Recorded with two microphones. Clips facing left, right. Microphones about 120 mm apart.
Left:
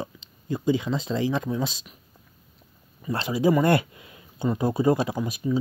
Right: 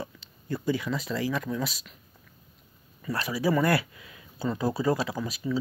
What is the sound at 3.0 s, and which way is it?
Speech, 25° left (ahead or behind).